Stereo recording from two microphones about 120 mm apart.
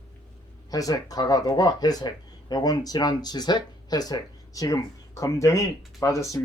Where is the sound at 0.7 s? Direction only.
30° left (ahead or behind).